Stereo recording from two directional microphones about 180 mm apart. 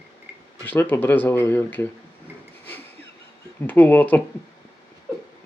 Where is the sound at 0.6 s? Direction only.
10° left (ahead or behind).